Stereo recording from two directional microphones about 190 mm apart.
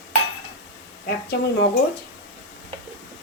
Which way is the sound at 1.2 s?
60° left (ahead or behind).